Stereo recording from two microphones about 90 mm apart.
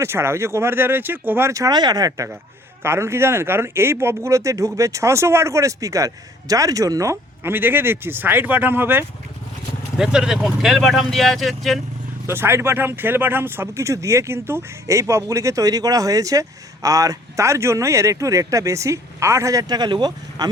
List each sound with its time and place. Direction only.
0.0 s speech: 30° right (ahead or behind)
2.8 s speech: 30° right (ahead or behind)
7.5 s speech: 25° right (ahead or behind)
10.0 s speech: 5° right (ahead or behind)
12.2 s speech: 25° right (ahead or behind); by 20.5 s 55° right (ahead or behind)